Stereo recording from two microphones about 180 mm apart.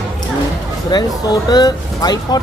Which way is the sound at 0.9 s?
20° left (ahead or behind).